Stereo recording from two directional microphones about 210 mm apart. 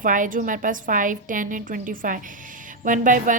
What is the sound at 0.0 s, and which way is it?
Speech, 40° right (ahead or behind).